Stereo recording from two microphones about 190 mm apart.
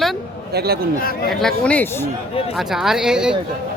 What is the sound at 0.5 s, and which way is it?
Speech, 55° right (ahead or behind).